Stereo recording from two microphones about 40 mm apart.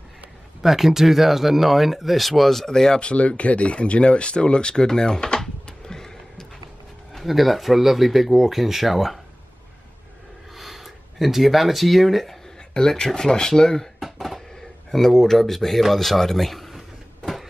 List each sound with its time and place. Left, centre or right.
0.6 s speech: centre
3.0 s speech: left; by 6.4 s centre
7.2 s speech: centre
10.5 s a sound: centre
12.7 s speech: centre
13.9 s a sound: centre
14.9 s speech: centre